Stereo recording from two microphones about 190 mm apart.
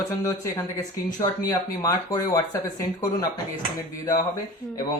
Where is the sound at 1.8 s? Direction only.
20° left (ahead or behind).